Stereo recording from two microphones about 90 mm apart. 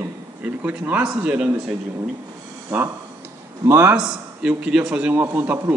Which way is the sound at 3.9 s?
10° right (ahead or behind).